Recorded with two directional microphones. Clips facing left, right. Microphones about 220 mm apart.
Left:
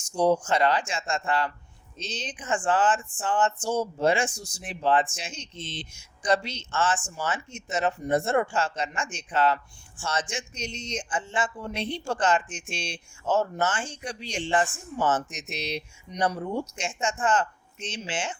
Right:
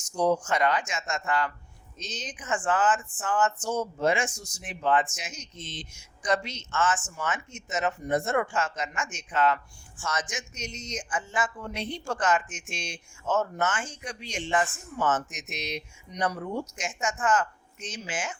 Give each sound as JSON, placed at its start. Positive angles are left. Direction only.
{"t": 0.1, "sound": "speech", "side_deg": 30}